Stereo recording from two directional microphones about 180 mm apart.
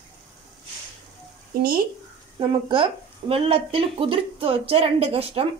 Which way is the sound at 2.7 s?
30° right (ahead or behind).